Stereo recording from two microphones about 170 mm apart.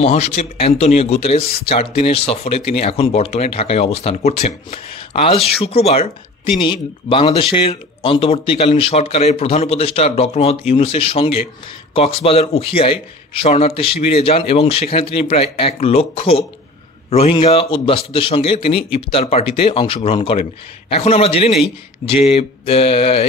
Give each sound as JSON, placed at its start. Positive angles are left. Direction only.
{"t": 0.0, "sound": "a man's voice", "side_deg": 40}